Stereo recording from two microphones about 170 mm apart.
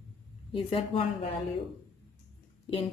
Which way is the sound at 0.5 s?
35° left (ahead or behind).